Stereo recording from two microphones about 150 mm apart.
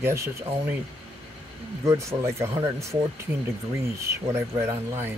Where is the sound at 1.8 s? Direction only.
20° right (ahead or behind).